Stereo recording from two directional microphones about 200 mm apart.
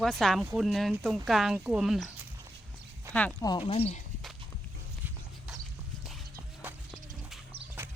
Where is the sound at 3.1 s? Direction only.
15° right (ahead or behind).